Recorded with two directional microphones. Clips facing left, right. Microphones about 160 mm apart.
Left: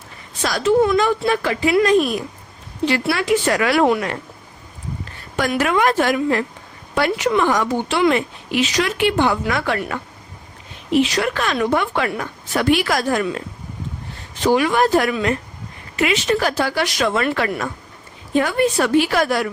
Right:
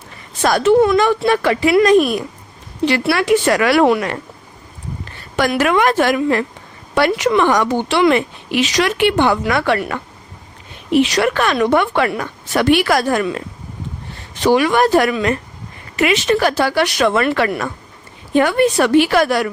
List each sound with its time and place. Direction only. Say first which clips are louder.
0.4 s speech: right 4 dB; 65° right (ahead or behind)
5.4 s speech: right 3 dB; 80° right; by 13.2 s 65° right (ahead or behind)
14.4 s speech: right 3 dB; 75° right (ahead or behind)